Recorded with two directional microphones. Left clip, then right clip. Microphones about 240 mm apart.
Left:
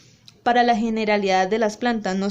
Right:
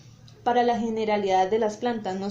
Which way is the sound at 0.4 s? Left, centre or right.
Left.